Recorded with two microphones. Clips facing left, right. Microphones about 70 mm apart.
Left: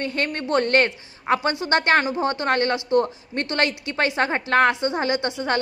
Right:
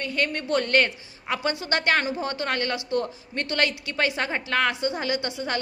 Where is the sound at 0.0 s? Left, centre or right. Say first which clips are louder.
Left 2 dB; left.